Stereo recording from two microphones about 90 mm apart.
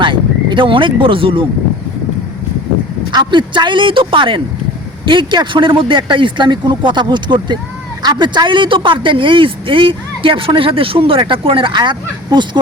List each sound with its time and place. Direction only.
0.0 s speech: 60° right (ahead or behind); by 1.5 s 80° right
3.1 s speech: 55° right (ahead or behind)
5.0 s a man's voice: 60° right (ahead or behind)